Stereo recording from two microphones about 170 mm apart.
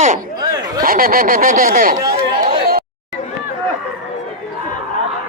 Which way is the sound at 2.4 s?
60° right (ahead or behind).